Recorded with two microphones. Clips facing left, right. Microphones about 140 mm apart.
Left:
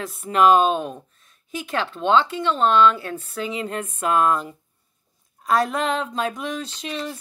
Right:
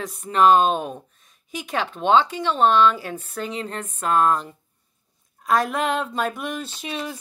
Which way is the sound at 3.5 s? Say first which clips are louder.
Left 2 dB; 10° left (ahead or behind).